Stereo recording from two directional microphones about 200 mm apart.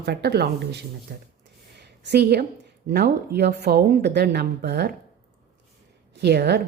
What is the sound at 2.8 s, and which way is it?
Speech, 55° right (ahead or behind).